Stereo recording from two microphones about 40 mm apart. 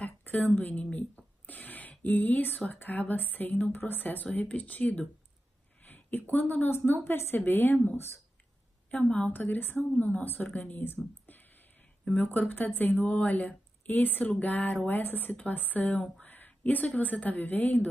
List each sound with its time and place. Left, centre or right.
0.3 s a woman's voice: left
0.9 s a sound: left
2.7 s a woman's voice: left
5.9 s a sound: left
6.1 s a woman's voice: left
6.9 s a woman's voice: left
9.1 s a woman's voice: left
12.3 s a woman's voice: left
13.8 s a woman's voice: left
14.9 s a woman's voice: left
16.3 s a woman's voice: left